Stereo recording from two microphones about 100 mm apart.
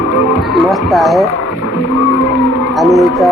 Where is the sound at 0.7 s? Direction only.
Centre (ahead or behind).